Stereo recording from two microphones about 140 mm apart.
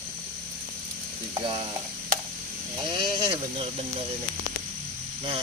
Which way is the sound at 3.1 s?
40° right (ahead or behind).